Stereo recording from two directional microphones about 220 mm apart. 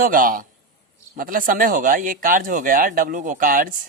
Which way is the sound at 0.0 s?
40° right (ahead or behind).